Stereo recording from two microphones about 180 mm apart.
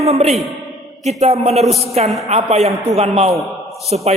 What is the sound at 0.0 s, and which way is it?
A man's voice, 35° right (ahead or behind).